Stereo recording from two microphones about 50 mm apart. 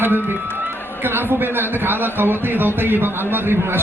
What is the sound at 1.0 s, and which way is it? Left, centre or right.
Speech, right.